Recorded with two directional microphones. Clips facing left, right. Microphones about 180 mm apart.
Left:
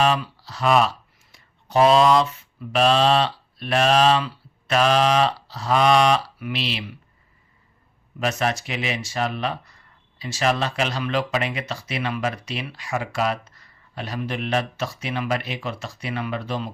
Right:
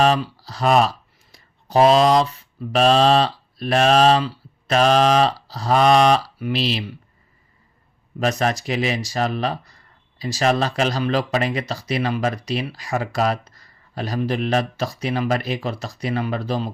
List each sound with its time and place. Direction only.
0.0 s speech: 40° right (ahead or behind)
8.2 s speech: 40° right (ahead or behind)